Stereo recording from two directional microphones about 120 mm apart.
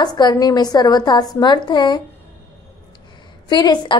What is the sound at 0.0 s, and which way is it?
A woman's voice, 35° left (ahead or behind).